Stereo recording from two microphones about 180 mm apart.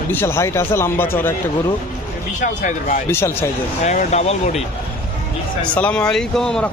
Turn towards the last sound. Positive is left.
turn(degrees=5)  # may be behind; listen again after turning